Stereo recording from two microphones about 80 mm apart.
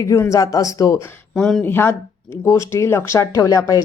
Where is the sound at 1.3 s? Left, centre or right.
Centre.